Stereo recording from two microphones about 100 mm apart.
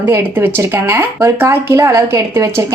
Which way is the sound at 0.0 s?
20° right (ahead or behind).